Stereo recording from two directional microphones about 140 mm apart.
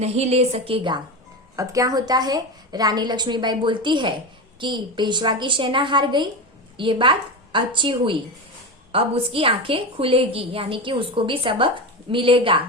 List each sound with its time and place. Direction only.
0.0 s a woman's voice: 50° right (ahead or behind)
1.5 s a woman's voice: 25° right (ahead or behind); by 12.6 s 40° right (ahead or behind)